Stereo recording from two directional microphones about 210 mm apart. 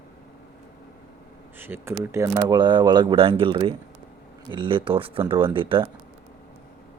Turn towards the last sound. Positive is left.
turn(degrees=-25)  # may be behind; listen again after turning